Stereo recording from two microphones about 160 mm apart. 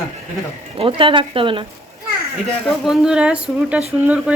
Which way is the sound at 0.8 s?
30° right (ahead or behind).